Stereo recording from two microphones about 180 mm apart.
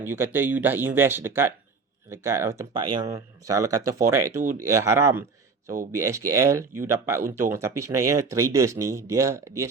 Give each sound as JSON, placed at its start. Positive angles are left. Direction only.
{"t": 0.0, "sound": "speech", "side_deg": -15}
{"t": 2.7, "sound": "speech", "side_deg": -25}